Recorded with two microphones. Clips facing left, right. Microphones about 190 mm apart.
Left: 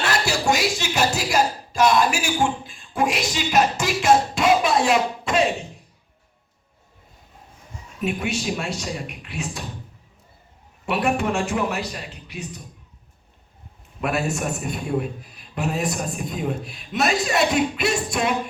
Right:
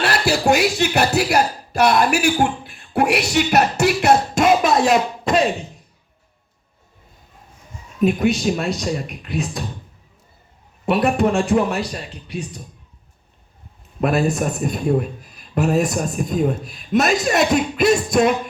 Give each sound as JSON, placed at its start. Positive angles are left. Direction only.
{"t": 0.1, "sound": "speech", "side_deg": -60}
{"t": 4.4, "sound": "speech", "side_deg": -45}
{"t": 8.0, "sound": "a man's voice", "side_deg": -35}
{"t": 10.8, "sound": "a man's voice", "side_deg": -35}
{"t": 14.0, "sound": "a man's voice", "side_deg": -35}